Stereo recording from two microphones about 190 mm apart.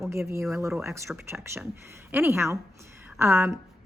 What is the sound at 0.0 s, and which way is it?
A woman's voice, 15° right (ahead or behind).